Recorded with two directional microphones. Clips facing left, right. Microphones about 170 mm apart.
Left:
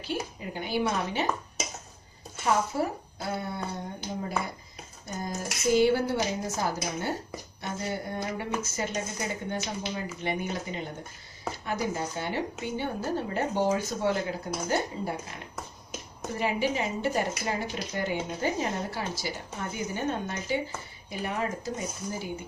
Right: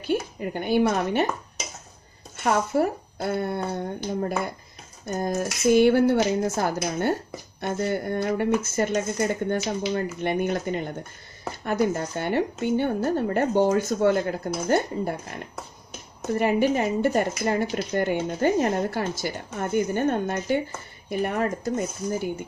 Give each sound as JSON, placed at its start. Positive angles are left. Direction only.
{"t": 0.0, "sound": "a woman's voice", "side_deg": -55}
{"t": 2.3, "sound": "a woman's voice", "side_deg": -55}
{"t": 5.0, "sound": "a woman's voice", "side_deg": -55}